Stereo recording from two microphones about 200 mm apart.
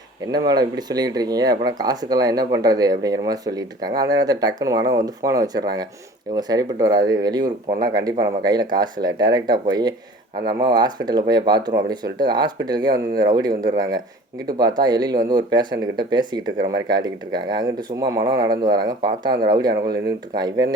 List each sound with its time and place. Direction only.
0.3 s speech: 20° right (ahead or behind)